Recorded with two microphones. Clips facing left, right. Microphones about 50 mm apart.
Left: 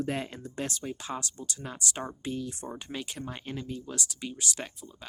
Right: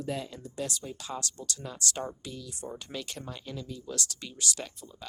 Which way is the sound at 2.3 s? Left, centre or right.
Left.